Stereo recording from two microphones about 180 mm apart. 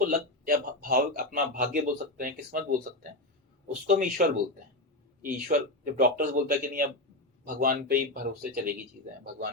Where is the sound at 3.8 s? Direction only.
50° right (ahead or behind).